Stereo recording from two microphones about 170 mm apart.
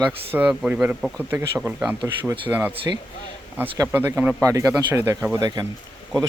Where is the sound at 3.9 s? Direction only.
10° right (ahead or behind).